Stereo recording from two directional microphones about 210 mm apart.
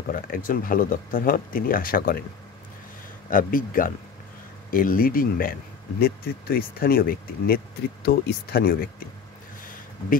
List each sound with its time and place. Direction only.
0.1 s speech: 40° left (ahead or behind)
3.3 s speech: 40° left (ahead or behind)